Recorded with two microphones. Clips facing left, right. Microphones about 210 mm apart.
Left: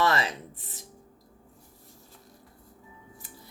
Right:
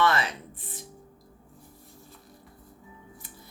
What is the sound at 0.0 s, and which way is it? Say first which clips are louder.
Music: right 1 dB; 35° left (ahead or behind).